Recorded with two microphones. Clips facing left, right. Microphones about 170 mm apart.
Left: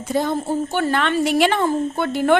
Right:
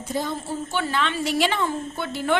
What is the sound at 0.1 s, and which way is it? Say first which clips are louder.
A woman's voice: left 7 dB; 55° left (ahead or behind).